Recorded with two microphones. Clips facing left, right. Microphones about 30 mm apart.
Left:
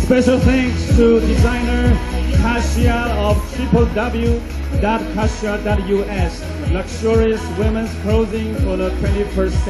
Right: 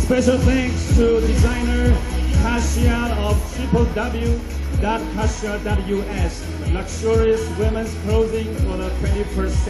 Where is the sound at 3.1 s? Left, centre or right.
Left.